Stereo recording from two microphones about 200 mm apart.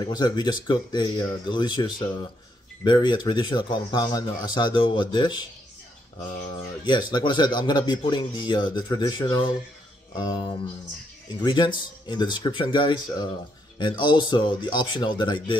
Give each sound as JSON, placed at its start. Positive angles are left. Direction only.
{"t": 0.0, "sound": "speech", "side_deg": 20}
{"t": 6.5, "sound": "speech", "side_deg": 20}